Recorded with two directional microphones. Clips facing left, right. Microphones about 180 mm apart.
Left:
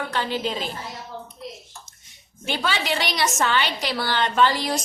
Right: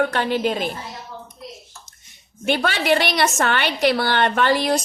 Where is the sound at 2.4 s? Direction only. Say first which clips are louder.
Right 5 dB; 60° right (ahead or behind).